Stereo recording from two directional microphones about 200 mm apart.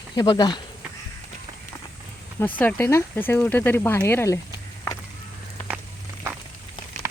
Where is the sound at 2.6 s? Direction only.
10° left (ahead or behind).